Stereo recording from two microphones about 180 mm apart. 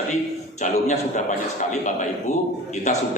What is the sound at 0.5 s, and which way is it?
A man's voice, 40° left (ahead or behind).